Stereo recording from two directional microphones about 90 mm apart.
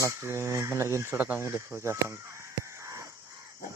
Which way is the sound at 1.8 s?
30° right (ahead or behind).